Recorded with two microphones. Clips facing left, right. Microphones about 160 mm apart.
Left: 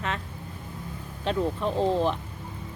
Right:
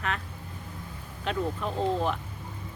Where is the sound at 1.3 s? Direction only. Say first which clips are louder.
Left 3 dB; 30° left (ahead or behind).